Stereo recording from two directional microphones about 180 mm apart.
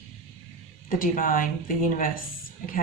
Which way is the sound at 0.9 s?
50° left (ahead or behind).